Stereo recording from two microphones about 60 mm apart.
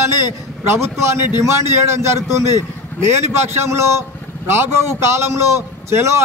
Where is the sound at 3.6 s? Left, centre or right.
Right.